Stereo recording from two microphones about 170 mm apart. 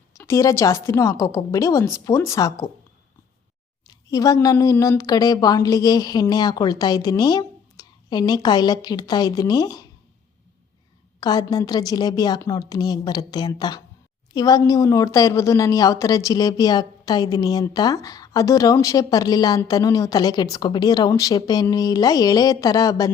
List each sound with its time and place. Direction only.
0.2 s a woman's voice: 15° left (ahead or behind)
3.8 s a woman's voice: 20° left (ahead or behind)
11.2 s a woman's voice: 25° left (ahead or behind)